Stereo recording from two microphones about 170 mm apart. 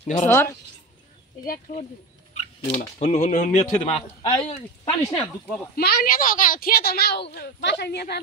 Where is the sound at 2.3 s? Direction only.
35° left (ahead or behind).